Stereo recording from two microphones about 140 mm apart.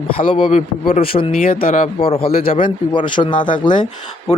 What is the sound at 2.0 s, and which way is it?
Speech, 40° left (ahead or behind).